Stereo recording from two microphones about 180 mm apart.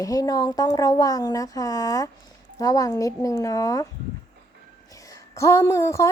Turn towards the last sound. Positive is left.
turn(degrees=15)  # may be behind; listen again after turning